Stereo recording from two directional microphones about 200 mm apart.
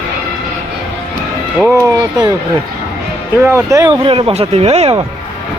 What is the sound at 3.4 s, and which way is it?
Speech, 15° right (ahead or behind).